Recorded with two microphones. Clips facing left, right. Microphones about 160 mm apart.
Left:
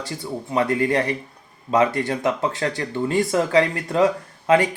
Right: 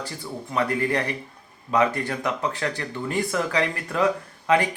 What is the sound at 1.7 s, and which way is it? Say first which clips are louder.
Speech: left 3 dB; 25° left (ahead or behind).